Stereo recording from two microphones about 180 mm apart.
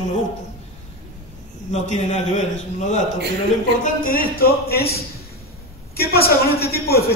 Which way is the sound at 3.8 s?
50° left (ahead or behind).